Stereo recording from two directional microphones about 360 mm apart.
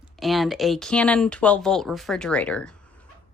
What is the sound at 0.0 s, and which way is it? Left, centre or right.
Speech, centre.